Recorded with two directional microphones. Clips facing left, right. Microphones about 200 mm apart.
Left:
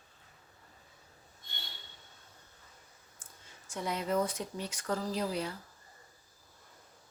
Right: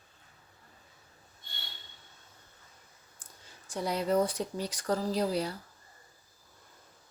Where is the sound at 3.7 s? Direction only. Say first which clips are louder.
Right 4 dB; 35° right (ahead or behind).